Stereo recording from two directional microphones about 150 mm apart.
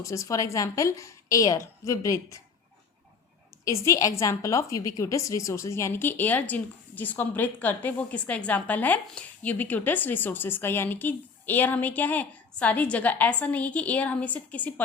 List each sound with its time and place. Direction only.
0.0 s a woman's voice: 20° left (ahead or behind)
3.6 s a woman's voice: 20° left (ahead or behind)